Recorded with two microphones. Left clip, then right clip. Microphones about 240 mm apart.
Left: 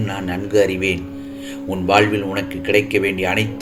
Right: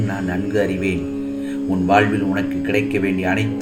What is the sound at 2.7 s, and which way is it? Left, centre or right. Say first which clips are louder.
Speech: left 5 dB; left.